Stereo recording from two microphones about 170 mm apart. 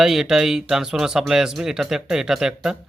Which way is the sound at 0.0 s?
Centre (ahead or behind).